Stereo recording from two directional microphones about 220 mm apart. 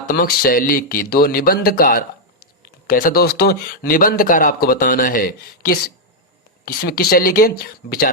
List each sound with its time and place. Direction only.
0.1 s speech: 40° left (ahead or behind)